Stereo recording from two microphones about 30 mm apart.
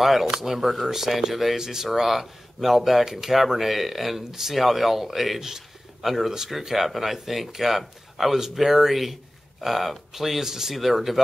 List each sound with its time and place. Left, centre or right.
0.0 s speech: centre
1.6 s a man's voice: centre